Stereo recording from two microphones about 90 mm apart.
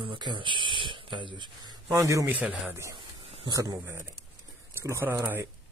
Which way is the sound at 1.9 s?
35° right (ahead or behind).